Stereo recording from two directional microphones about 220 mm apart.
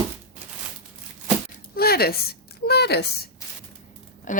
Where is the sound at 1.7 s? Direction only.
45° left (ahead or behind).